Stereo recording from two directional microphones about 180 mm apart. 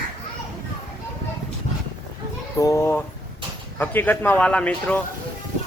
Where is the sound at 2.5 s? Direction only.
20° left (ahead or behind).